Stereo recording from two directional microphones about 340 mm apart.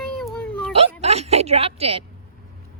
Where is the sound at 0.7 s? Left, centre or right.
Centre.